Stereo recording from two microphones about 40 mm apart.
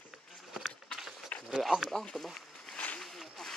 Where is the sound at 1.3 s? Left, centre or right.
Left.